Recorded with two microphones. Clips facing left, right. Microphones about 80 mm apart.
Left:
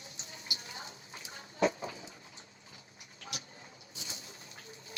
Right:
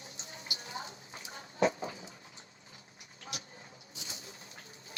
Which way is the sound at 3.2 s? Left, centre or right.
Right.